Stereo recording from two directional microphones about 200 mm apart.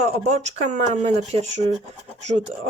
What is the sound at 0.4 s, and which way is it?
Speech, 35° right (ahead or behind).